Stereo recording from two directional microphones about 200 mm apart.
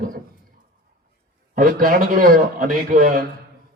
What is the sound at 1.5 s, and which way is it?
A man's voice, 40° right (ahead or behind).